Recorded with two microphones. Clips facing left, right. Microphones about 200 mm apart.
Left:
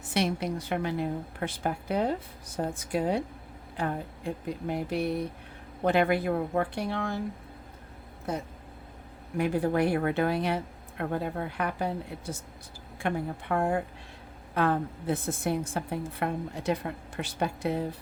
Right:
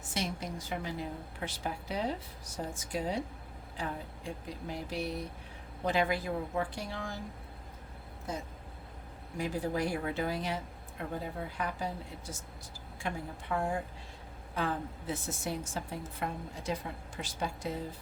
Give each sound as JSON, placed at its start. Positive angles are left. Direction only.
{"t": 0.0, "sound": "a woman's voice", "side_deg": 65}
{"t": 9.4, "sound": "a woman's voice", "side_deg": 60}